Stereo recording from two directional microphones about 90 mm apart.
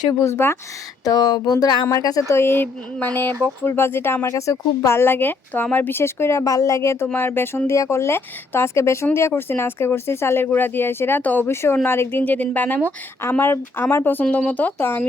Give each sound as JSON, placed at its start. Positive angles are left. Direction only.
{"t": 0.1, "sound": "speech", "side_deg": 30}
{"t": 1.0, "sound": "speech", "side_deg": 45}
{"t": 2.3, "sound": "speech", "side_deg": 25}